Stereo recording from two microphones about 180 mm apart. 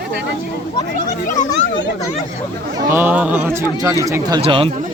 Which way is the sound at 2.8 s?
10° right (ahead or behind).